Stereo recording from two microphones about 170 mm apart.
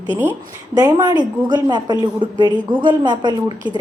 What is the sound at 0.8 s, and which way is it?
A woman's voice, 20° right (ahead or behind).